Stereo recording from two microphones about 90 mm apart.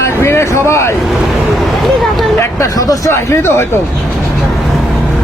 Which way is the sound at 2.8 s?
40° left (ahead or behind).